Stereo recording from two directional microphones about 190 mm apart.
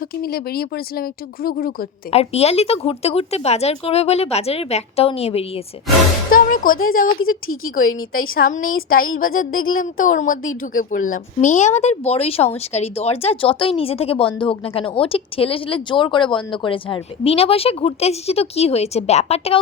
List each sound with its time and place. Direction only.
0.2 s speech: 55° left (ahead or behind)
2.0 s speech: 35° left (ahead or behind)
6.3 s music: 45° left (ahead or behind)
7.2 s speech: 90° left
8.3 s speech: 50° left (ahead or behind)
8.6 s speech: 90° left
9.7 s a woman's voice: 45° left (ahead or behind)